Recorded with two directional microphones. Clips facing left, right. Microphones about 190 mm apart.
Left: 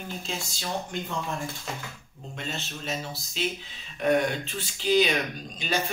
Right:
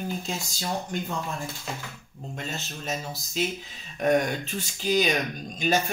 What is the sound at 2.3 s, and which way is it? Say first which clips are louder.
Speech: even; 45° right (ahead or behind).